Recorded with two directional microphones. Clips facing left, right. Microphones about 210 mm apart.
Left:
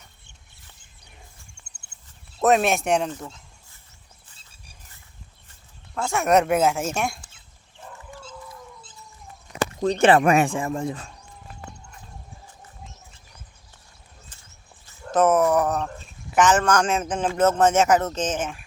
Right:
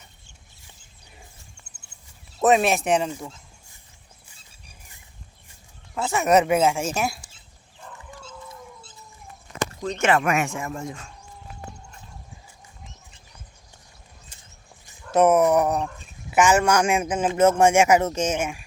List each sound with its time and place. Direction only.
2.4 s speech: centre (ahead or behind)
5.9 s speech: 5° right (ahead or behind)
9.8 s speech: 35° left (ahead or behind)
15.1 s speech: 10° right (ahead or behind)